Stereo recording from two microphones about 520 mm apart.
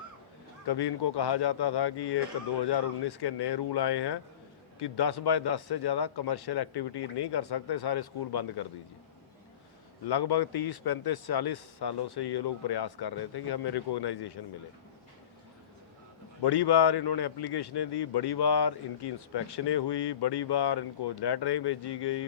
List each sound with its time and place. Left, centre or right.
0.7 s a man's voice: left
10.1 s a man's voice: left
16.4 s a man's voice: left